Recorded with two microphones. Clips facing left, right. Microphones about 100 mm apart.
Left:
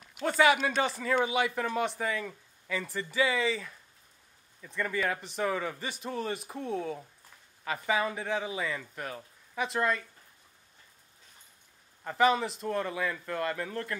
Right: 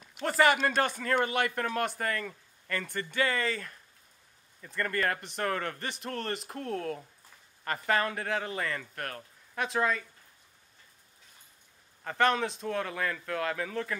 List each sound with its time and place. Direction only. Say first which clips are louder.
0.2 s a man's voice: even; centre (ahead or behind)
12.0 s a man's voice: left 1 dB; 5° left (ahead or behind)